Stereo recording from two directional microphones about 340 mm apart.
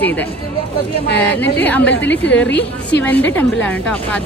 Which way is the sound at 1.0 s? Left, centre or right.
Left.